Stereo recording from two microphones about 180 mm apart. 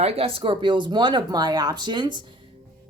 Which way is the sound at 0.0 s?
30° right (ahead or behind).